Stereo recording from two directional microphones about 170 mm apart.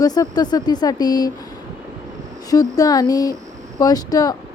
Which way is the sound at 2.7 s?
20° left (ahead or behind).